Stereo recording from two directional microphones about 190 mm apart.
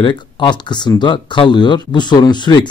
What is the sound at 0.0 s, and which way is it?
Speech, 25° left (ahead or behind).